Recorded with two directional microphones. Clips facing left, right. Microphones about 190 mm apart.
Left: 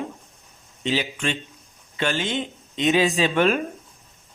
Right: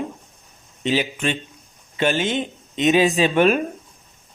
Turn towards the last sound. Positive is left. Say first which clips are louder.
# right 3 dB
turn(degrees=-15)  # may be behind; listen again after turning